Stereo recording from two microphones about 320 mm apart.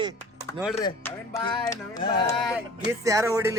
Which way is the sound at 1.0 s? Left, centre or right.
Centre.